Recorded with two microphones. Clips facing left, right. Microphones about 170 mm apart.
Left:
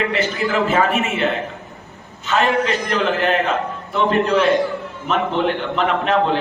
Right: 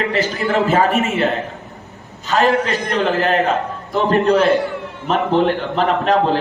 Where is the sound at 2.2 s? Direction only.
40° right (ahead or behind).